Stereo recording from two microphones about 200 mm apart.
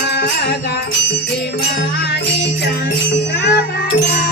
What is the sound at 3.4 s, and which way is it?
Music, 55° left (ahead or behind).